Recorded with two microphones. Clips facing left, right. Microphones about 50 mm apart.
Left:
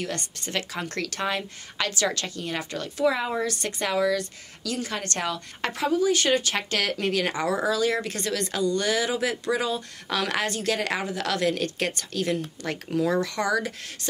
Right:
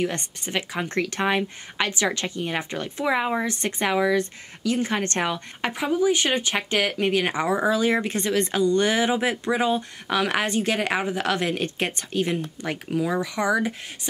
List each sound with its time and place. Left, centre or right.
0.0 s speech: right